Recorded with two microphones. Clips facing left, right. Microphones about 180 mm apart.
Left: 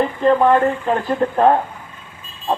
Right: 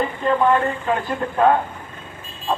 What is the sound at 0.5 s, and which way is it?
Speech, 40° left (ahead or behind).